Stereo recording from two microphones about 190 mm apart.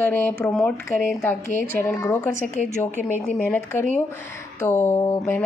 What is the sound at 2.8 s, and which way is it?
Speech, 40° left (ahead or behind).